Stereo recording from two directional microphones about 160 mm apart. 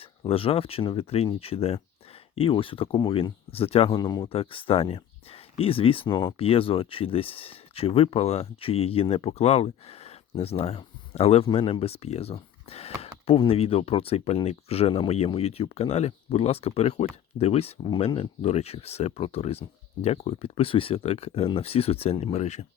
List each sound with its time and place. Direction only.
0.0 s speech: 35° left (ahead or behind)